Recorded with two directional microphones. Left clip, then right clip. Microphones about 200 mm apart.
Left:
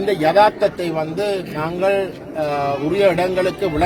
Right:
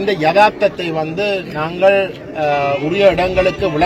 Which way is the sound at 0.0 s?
5° left (ahead or behind).